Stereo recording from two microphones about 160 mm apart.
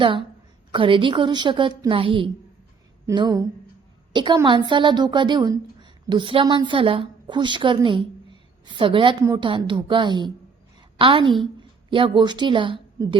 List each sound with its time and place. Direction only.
0.7 s a woman's voice: 30° right (ahead or behind)
3.1 s a woman's voice: 25° right (ahead or behind)